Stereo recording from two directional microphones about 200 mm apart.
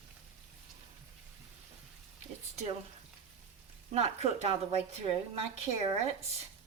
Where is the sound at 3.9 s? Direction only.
35° right (ahead or behind).